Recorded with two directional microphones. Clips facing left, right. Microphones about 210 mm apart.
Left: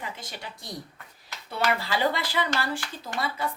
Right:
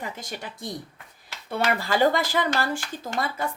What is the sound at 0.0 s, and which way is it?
Speech, 45° right (ahead or behind).